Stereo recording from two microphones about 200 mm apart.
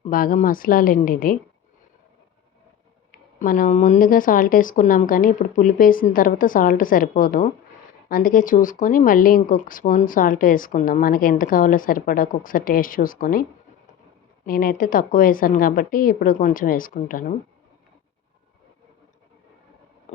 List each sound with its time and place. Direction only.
0.0 s speech: 45° left (ahead or behind)
3.3 s speech: 40° left (ahead or behind)
14.4 s speech: 45° left (ahead or behind)